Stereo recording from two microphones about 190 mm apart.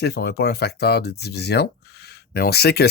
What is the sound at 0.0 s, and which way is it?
Speech, 60° left (ahead or behind).